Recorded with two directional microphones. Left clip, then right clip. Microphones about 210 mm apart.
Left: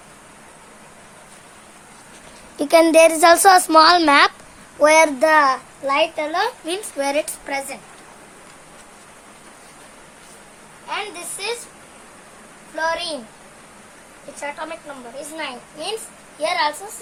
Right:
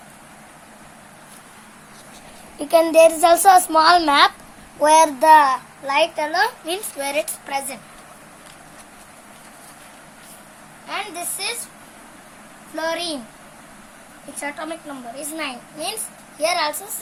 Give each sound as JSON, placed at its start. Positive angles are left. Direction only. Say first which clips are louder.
{"t": 2.6, "sound": "a woman's voice", "louder": "left 1 dB", "side_deg": 40}
{"t": 10.8, "sound": "a woman's voice", "louder": "even", "side_deg": 15}
{"t": 12.7, "sound": "a child's voice", "louder": "left 2 dB", "side_deg": 15}
{"t": 14.3, "sound": "a child's voice", "louder": "even", "side_deg": 15}